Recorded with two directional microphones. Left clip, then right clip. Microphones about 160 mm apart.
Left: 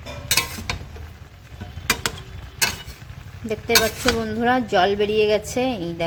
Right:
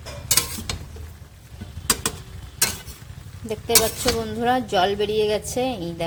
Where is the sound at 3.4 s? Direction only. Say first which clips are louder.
Left 2 dB; 5° left (ahead or behind).